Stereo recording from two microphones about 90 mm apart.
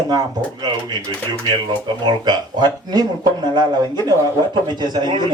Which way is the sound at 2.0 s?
55° right (ahead or behind).